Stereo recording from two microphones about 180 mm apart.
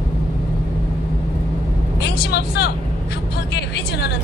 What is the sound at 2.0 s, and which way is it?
Vehicle, 65° left (ahead or behind).